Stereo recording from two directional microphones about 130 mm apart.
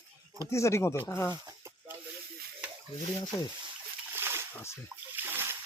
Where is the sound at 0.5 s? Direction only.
20° left (ahead or behind).